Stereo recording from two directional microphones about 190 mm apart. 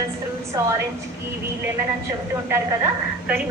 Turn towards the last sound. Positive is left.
turn(degrees=-10)  # may be behind; listen again after turning